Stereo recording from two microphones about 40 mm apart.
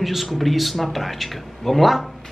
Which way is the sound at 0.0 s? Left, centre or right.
Centre.